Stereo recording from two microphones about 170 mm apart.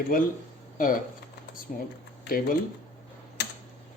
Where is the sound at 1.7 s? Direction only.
50° left (ahead or behind).